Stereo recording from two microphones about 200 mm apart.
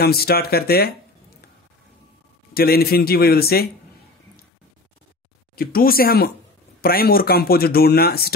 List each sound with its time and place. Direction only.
0.0 s speech: 50° left (ahead or behind)
2.5 s speech: 50° left (ahead or behind)
5.6 s speech: 45° left (ahead or behind)